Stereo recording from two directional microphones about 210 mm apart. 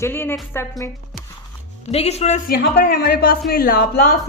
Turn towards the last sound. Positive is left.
turn(degrees=45)  # may be behind; listen again after turning